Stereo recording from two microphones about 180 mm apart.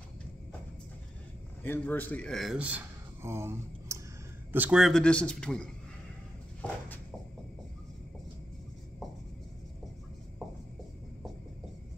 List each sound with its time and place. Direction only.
1.6 s a man's voice: 10° left (ahead or behind)
6.6 s walk: 10° left (ahead or behind)